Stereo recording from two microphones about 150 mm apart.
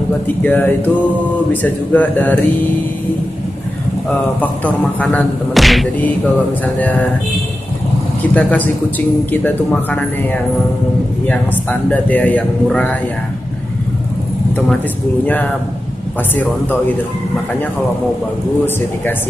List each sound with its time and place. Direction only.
0.4 s speech: 10° left (ahead or behind)
4.4 s speech: 10° left (ahead or behind)
6.6 s speech: 10° left (ahead or behind)
8.4 s speech: 10° left (ahead or behind)
11.9 s speech: 10° left (ahead or behind)